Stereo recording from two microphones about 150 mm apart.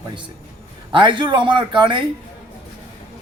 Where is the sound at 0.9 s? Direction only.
30° right (ahead or behind).